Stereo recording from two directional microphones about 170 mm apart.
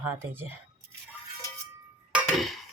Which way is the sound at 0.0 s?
15° right (ahead or behind).